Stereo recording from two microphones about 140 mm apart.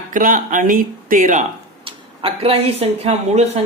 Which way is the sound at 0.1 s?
75° right (ahead or behind).